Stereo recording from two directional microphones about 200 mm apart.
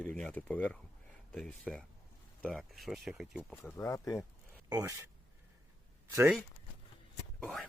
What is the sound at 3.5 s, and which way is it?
Speech, 10° left (ahead or behind).